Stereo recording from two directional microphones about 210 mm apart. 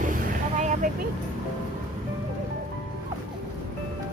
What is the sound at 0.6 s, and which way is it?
Vehicle, 35° right (ahead or behind).